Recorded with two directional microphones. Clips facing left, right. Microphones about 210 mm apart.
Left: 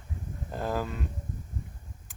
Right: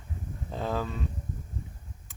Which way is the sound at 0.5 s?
5° left (ahead or behind).